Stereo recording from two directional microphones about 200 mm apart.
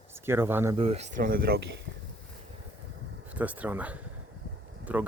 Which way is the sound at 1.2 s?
45° right (ahead or behind).